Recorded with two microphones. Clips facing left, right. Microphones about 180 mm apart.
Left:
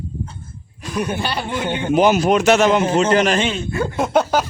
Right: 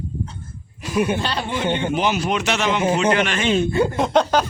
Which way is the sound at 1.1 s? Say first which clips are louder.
Left 1 dB; 10° left (ahead or behind).